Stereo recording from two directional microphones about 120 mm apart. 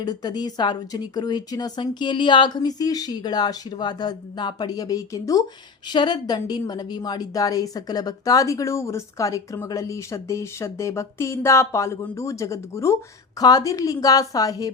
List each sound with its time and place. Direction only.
0.0 s a woman's voice: 35° left (ahead or behind)